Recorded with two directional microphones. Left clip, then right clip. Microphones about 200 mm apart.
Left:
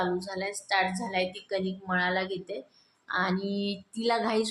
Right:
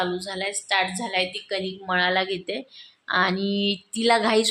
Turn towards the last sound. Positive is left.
turn(degrees=-30)  # may be behind; listen again after turning